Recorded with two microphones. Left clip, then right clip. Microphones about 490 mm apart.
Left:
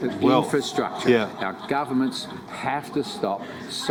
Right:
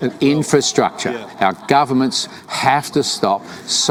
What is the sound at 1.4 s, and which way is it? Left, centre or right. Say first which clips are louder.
A man's voice: right 12 dB; right.